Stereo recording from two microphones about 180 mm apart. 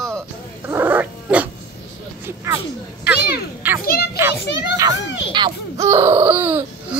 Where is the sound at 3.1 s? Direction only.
65° left (ahead or behind).